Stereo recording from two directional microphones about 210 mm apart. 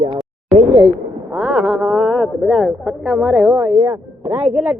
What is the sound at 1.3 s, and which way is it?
Speech, 5° right (ahead or behind).